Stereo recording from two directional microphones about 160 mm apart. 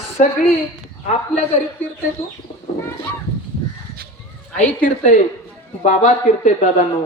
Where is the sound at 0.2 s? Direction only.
50° left (ahead or behind).